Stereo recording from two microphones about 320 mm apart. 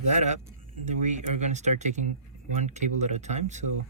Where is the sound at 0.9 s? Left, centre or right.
Right.